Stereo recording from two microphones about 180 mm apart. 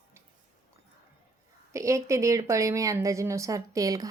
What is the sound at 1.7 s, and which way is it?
Speech, 15° right (ahead or behind).